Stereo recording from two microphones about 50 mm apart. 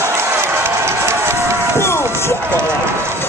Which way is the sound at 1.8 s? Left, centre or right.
Left.